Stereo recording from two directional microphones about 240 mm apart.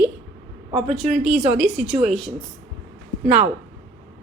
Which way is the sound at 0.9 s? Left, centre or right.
Centre.